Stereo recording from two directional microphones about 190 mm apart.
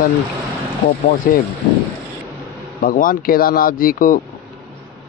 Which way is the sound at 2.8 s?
50° left (ahead or behind).